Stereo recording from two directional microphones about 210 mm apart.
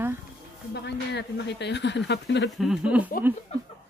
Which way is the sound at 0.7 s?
55° left (ahead or behind).